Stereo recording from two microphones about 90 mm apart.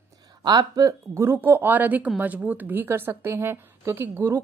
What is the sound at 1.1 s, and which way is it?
Speech, 30° right (ahead or behind).